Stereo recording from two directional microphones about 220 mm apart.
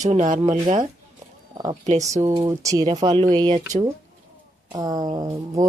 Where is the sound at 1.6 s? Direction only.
30° right (ahead or behind).